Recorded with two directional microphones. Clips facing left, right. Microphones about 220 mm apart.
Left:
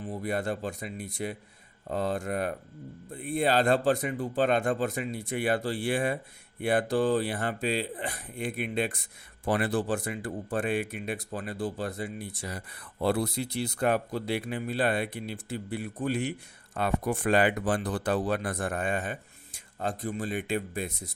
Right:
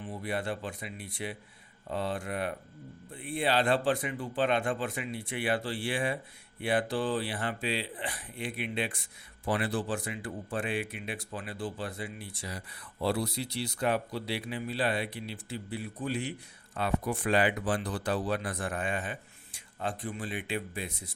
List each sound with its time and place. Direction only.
0.0 s speech: 40° left (ahead or behind); by 16.3 s 60° left (ahead or behind)
16.7 s speech: 45° left (ahead or behind)